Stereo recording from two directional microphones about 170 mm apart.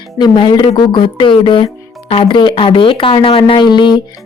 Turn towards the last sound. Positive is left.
turn(degrees=25)  # may be behind; listen again after turning